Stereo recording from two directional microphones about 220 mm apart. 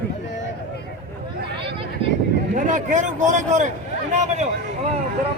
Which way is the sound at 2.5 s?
35° right (ahead or behind).